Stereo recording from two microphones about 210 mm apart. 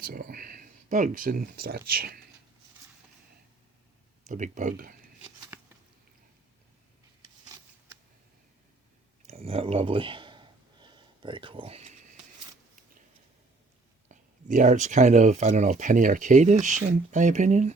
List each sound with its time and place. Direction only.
0.0 s speech: 45° right (ahead or behind)
4.3 s speech: 35° right (ahead or behind)
9.2 s a sound: 30° right (ahead or behind)
14.1 s speech: 35° right (ahead or behind)